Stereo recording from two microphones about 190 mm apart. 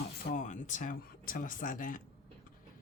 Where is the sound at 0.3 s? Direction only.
40° left (ahead or behind).